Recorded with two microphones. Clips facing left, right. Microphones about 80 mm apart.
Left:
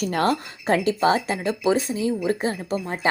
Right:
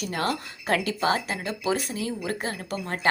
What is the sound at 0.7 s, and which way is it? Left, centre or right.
Speech, left.